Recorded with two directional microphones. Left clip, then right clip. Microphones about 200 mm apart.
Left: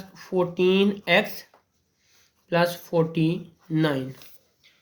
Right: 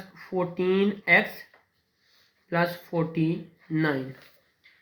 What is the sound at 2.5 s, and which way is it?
Speech, 45° left (ahead or behind).